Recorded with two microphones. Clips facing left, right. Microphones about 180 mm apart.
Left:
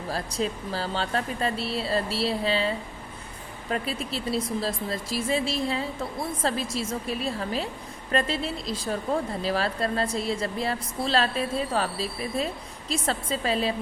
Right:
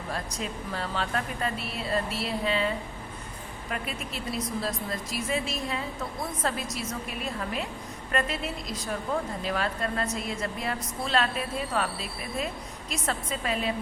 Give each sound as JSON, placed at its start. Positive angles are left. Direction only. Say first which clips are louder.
{"t": 0.1, "sound": "a woman's voice", "louder": "left 6 dB", "side_deg": 30}